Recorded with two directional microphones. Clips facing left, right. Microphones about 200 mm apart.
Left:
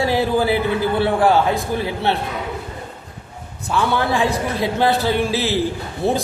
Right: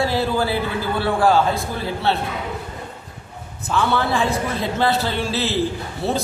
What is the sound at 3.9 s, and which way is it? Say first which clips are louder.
A man's voice: left 1 dB; 15° left (ahead or behind).